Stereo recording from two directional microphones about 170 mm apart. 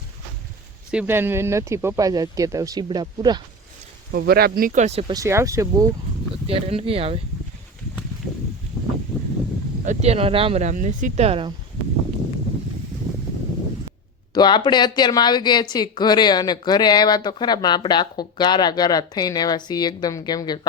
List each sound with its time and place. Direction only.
0.9 s speech: 10° right (ahead or behind); by 3.4 s 25° right (ahead or behind)
4.1 s speech: 70° right (ahead or behind); by 5.1 s 35° right (ahead or behind)
5.1 s speech: 15° right (ahead or behind)
6.5 s speech: 35° right (ahead or behind)
9.1 s a sound: 5° left (ahead or behind)
9.8 s speech: 40° right (ahead or behind)
14.3 s speech: 25° left (ahead or behind)